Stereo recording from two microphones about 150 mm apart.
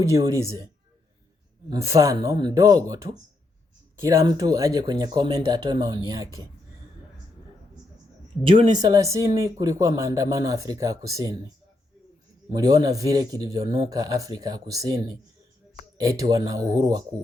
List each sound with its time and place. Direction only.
0.0 s speech: 25° right (ahead or behind)
1.7 s speech: 20° right (ahead or behind)
8.4 s speech: 35° right (ahead or behind)
12.5 s speech: 25° right (ahead or behind)